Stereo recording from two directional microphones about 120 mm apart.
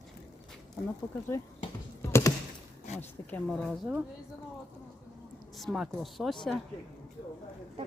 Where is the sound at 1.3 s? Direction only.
25° left (ahead or behind).